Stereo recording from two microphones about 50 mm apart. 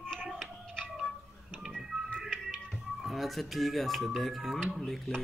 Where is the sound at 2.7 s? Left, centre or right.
Centre.